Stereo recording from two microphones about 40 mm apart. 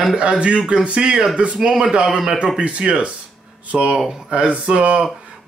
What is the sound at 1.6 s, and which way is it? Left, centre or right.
Speech, centre.